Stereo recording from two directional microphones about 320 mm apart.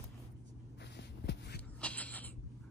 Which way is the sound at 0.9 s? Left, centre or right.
Left.